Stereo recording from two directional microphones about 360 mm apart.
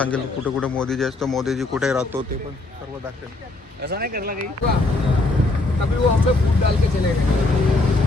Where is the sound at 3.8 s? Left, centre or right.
Right.